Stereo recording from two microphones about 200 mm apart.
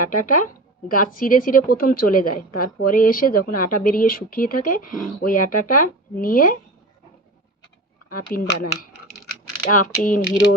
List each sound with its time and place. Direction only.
0.1 s a woman's voice: 45° left (ahead or behind)
8.1 s a woman's voice: 45° left (ahead or behind)